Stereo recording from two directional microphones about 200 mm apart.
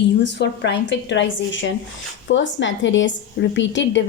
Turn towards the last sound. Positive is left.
turn(degrees=65)  # may be behind; listen again after turning